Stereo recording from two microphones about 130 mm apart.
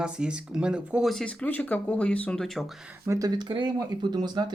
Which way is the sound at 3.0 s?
25° right (ahead or behind).